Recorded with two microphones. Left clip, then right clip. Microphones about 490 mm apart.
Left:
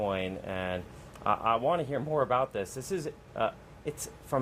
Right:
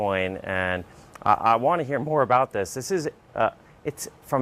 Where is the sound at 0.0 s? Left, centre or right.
Right.